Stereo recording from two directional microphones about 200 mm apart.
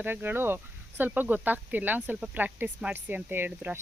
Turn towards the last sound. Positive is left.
turn(degrees=-10)  # may be behind; listen again after turning